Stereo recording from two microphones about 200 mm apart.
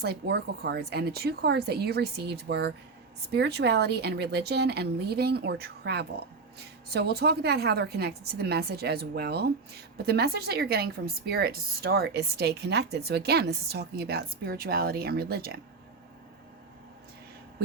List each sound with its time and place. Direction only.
0.0 s a woman's voice: 55° right (ahead or behind)